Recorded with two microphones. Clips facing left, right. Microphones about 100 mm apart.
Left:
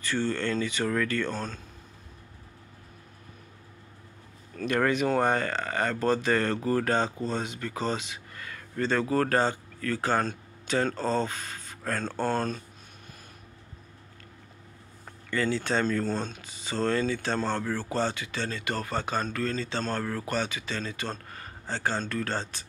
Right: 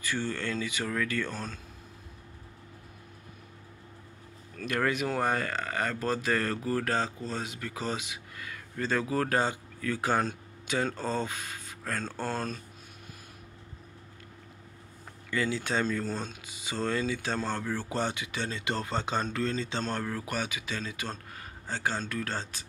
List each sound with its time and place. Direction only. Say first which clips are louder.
0.0 s speech: left 4 dB; 10° right (ahead or behind)
4.6 s speech: left 4 dB; centre (ahead or behind)
15.2 s speech: left 3 dB; 5° right (ahead or behind)